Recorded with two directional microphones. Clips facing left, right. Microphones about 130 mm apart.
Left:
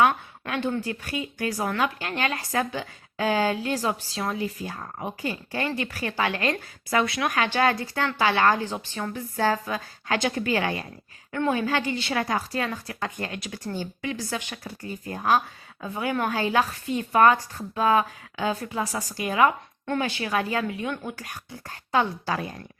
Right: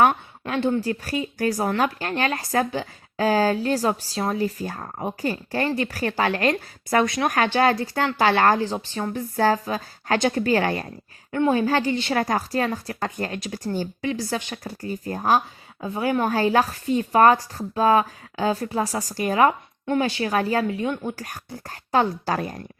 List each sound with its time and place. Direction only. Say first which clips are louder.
0.1 s a woman's voice: right 3 dB; 25° right (ahead or behind)
0.8 s a woman's voice: right 5 dB; 35° right (ahead or behind)
9.1 s a woman's voice: right 4 dB; 40° right (ahead or behind)